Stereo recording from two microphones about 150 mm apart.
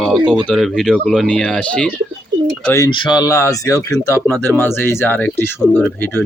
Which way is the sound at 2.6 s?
20° left (ahead or behind).